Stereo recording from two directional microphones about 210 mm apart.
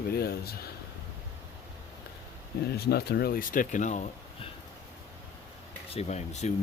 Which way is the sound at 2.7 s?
50° left (ahead or behind).